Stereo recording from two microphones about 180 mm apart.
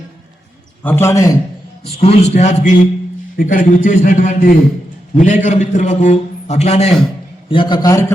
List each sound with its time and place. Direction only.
0.9 s a man's voice: 15° left (ahead or behind)
1.8 s a man's voice: 35° left (ahead or behind)